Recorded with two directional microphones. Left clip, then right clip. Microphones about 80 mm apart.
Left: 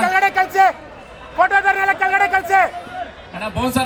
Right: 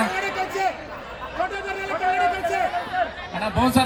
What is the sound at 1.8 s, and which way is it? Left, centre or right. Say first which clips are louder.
Speech: left 6 dB; left.